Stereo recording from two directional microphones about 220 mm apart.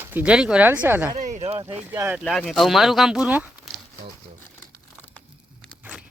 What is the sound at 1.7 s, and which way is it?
Speech, 5° right (ahead or behind).